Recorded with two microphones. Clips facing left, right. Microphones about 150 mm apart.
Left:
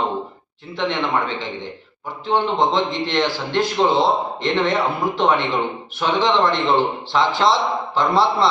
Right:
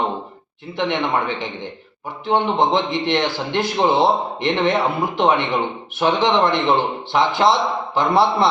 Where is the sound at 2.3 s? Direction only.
20° right (ahead or behind).